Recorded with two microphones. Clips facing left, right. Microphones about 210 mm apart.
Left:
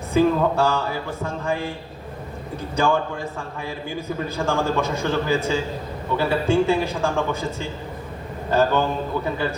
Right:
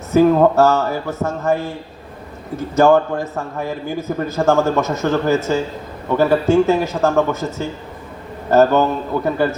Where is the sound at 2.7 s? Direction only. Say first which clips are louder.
Right 9 dB; 45° right (ahead or behind).